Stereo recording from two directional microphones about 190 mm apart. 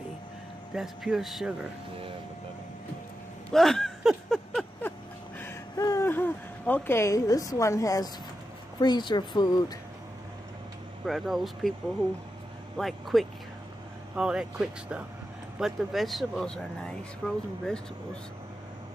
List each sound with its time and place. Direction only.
0.7 s speech: centre (ahead or behind)
3.5 s a sound: centre (ahead or behind)
5.4 s a sound: 15° left (ahead or behind)
8.7 s speech: 20° left (ahead or behind)
11.1 s speech: centre (ahead or behind)
12.7 s speech: centre (ahead or behind)